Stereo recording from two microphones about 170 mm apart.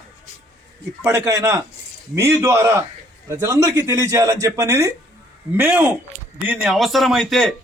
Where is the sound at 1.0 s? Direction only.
15° right (ahead or behind).